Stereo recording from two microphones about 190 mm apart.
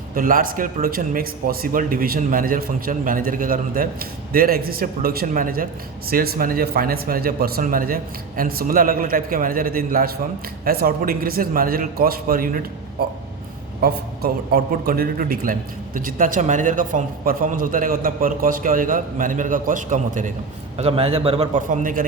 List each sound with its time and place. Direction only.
0.1 s a man's voice: 45° right (ahead or behind)
13.8 s a man's voice: 50° right (ahead or behind)
20.7 s a man's voice: 30° right (ahead or behind)